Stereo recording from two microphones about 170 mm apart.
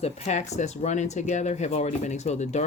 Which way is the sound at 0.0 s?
40° left (ahead or behind).